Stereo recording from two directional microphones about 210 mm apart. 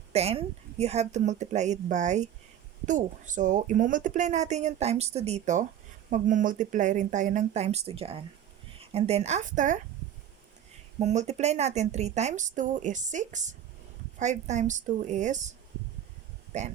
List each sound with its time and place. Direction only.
0.1 s speech: 30° right (ahead or behind)
11.0 s speech: 35° right (ahead or behind)